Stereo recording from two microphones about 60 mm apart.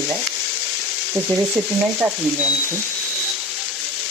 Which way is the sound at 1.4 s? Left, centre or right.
Right.